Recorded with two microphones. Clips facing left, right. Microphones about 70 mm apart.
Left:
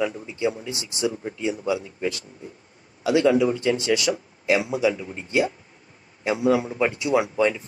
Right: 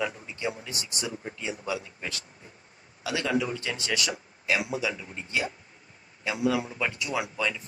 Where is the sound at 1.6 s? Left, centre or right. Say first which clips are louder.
Left 8 dB; left.